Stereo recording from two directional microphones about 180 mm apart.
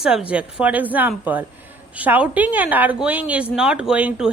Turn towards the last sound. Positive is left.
turn(degrees=-5)  # may be behind; listen again after turning